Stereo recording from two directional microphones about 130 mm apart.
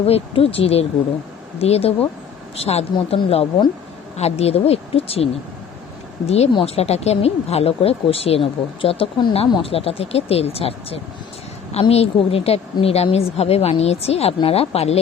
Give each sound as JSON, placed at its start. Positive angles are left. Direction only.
{"t": 0.0, "sound": "speech", "side_deg": 50}